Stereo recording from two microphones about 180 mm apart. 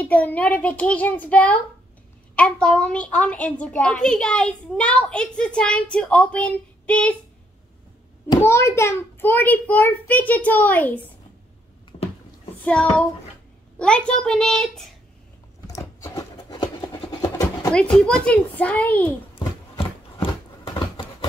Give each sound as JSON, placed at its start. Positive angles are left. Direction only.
{"t": 0.0, "sound": "a child's voice", "side_deg": 10}
{"t": 8.4, "sound": "a child's voice", "side_deg": 15}
{"t": 12.6, "sound": "a child's voice", "side_deg": 5}
{"t": 15.6, "sound": "a sound", "side_deg": 20}
{"t": 17.7, "sound": "a child's voice", "side_deg": 5}
{"t": 19.3, "sound": "a sound", "side_deg": 30}